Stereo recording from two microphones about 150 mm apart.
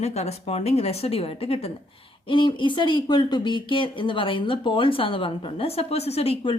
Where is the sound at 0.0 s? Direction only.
45° left (ahead or behind).